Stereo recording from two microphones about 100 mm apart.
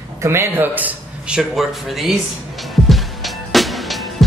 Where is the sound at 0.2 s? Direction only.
25° right (ahead or behind).